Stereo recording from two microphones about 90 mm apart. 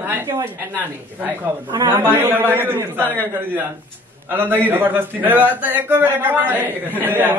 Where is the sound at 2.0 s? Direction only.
25° right (ahead or behind).